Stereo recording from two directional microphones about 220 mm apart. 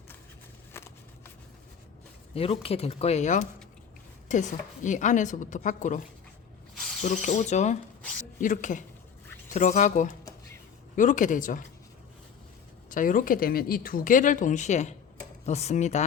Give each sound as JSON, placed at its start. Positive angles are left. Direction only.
{"t": 0.7, "sound": "a sound", "side_deg": 10}
{"t": 2.3, "sound": "speech", "side_deg": 25}
{"t": 12.9, "sound": "speech", "side_deg": 35}